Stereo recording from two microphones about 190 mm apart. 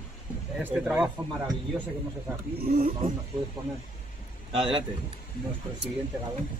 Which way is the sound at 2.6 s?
50° right (ahead or behind).